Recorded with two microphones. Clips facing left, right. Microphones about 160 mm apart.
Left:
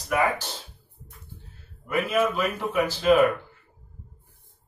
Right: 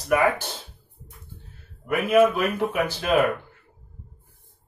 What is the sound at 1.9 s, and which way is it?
A man's voice, 55° right (ahead or behind).